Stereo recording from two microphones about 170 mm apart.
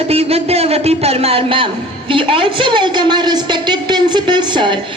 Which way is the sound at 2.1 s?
30° right (ahead or behind).